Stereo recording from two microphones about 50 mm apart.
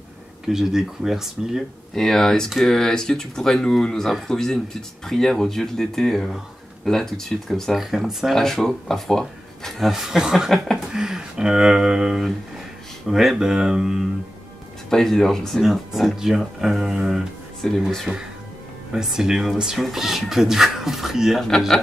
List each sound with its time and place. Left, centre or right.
0.5 s speech: centre
2.0 s speech: centre
7.7 s speech: centre
9.8 s speech: centre
14.9 s speech: centre
15.6 s speech: centre
17.6 s speech: centre
18.1 s speech: right
18.9 s speech: centre
21.5 s speech: centre